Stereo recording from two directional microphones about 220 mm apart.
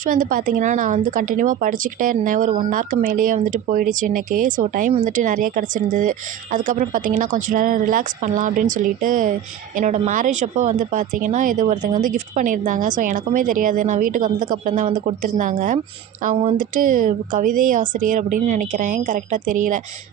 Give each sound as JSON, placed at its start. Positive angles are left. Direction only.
{"t": 0.0, "sound": "a woman's voice", "side_deg": -40}